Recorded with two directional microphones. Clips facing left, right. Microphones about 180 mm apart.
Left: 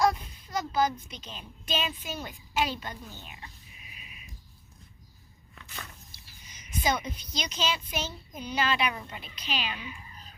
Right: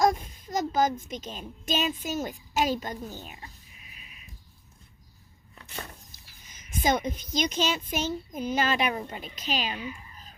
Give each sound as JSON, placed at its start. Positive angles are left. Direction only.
{"t": 0.0, "sound": "a child's voice", "side_deg": -45}
{"t": 5.5, "sound": "a sound", "side_deg": -35}
{"t": 6.7, "sound": "a woman's voice", "side_deg": -50}